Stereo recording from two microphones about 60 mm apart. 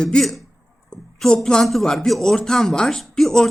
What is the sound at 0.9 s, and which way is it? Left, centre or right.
Speech, centre.